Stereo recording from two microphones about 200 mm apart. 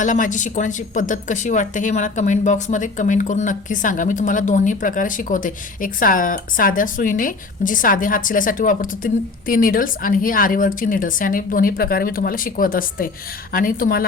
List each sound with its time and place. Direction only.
0.0 s a woman's voice: 40° left (ahead or behind)